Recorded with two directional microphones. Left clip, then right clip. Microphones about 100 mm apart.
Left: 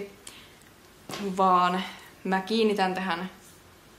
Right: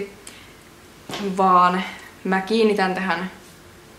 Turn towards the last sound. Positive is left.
turn(degrees=15)  # may be behind; listen again after turning